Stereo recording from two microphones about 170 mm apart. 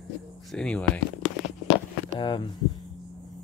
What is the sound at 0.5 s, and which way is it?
Speech, 5° left (ahead or behind).